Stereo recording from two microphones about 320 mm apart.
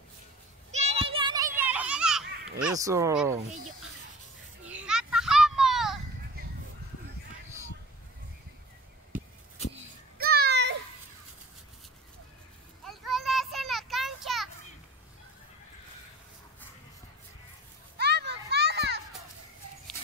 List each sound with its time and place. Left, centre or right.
0.7 s a sound: centre
1.6 s children playing: centre
2.6 s speech: centre
4.6 s children playing: centre
9.1 s a sound: centre
9.6 s a sound: centre
10.1 s children playing: right
12.8 s children playing: centre
17.9 s children playing: right